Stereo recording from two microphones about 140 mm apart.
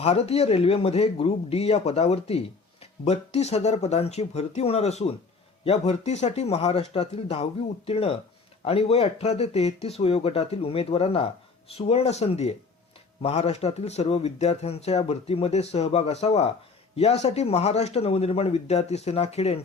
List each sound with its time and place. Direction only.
0.0 s speech: 45° left (ahead or behind)